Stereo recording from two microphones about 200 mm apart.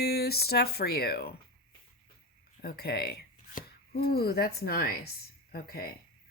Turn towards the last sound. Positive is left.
turn(degrees=50)  # may be behind; listen again after turning